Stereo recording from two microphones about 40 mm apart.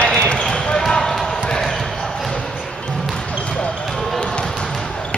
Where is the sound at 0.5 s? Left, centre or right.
Centre.